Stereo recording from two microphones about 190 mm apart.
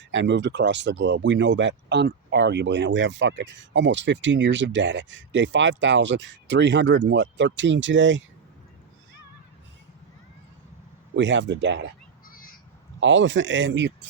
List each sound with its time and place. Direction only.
0.1 s speech: 70° right (ahead or behind)
11.1 s speech: 75° right (ahead or behind)
12.3 s crow: 45° left (ahead or behind)
13.0 s speech: 80° right